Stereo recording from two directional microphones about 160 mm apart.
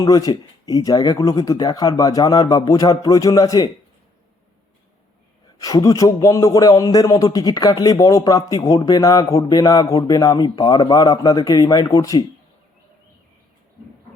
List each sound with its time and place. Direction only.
0.0 s a man's voice: 25° left (ahead or behind)
5.5 s a man's voice: 20° left (ahead or behind)